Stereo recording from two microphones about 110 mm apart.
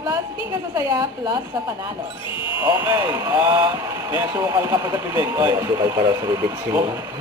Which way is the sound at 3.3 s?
35° right (ahead or behind).